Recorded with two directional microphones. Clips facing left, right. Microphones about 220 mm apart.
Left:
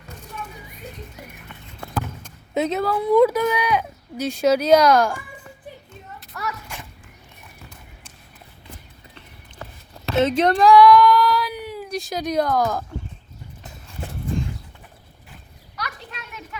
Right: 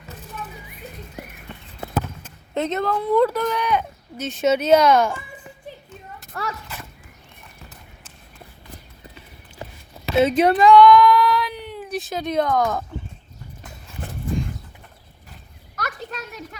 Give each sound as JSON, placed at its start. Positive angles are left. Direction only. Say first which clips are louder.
{"t": 1.8, "sound": "a sound", "louder": "right 3 dB", "side_deg": -20}
{"t": 2.6, "sound": "speech", "louder": "left 1 dB", "side_deg": 5}
{"t": 10.1, "sound": "speech", "louder": "right 2 dB", "side_deg": -10}
{"t": 15.7, "sound": "children playing", "louder": "right 4 dB", "side_deg": -45}